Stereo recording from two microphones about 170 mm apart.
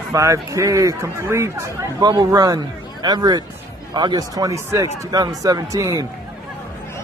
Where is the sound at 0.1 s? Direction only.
20° right (ahead or behind).